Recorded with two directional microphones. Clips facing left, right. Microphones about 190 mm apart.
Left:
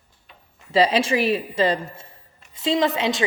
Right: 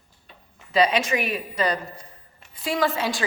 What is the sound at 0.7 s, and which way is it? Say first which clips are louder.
A woman's voice: left 2 dB; 30° left (ahead or behind).